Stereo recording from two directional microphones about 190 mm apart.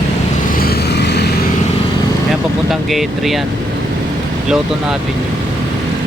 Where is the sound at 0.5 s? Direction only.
55° left (ahead or behind).